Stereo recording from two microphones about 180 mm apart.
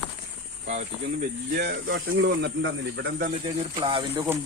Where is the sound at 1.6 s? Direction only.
65° right (ahead or behind).